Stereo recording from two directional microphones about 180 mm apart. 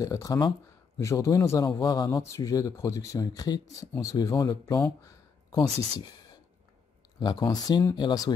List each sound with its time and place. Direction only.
0.0 s speech: 20° left (ahead or behind)
7.2 s speech: 25° left (ahead or behind)